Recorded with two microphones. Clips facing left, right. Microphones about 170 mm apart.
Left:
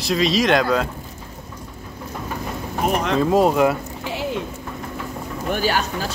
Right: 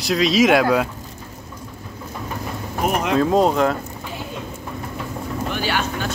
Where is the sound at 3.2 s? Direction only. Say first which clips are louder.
Left 1 dB; 5° left (ahead or behind).